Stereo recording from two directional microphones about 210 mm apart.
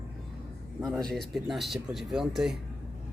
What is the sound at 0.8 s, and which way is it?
Speech, centre (ahead or behind).